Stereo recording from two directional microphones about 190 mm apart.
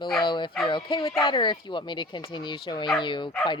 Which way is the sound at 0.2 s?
25° left (ahead or behind).